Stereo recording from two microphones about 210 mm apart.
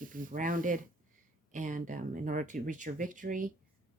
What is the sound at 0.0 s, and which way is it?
Speech, 40° right (ahead or behind).